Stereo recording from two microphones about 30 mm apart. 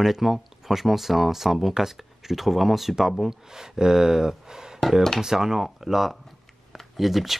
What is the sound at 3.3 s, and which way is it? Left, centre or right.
Speech, centre.